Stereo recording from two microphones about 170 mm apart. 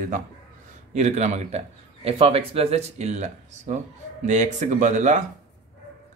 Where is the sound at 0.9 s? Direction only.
40° right (ahead or behind).